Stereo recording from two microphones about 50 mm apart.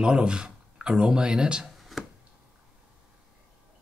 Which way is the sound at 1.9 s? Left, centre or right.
Centre.